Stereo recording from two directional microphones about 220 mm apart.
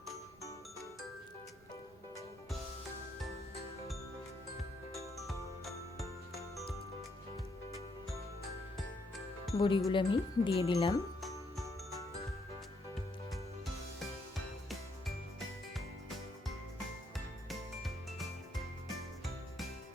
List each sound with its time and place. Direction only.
5.2 s music: centre (ahead or behind)
9.6 s wind chime: 20° left (ahead or behind)
14.7 s music: centre (ahead or behind)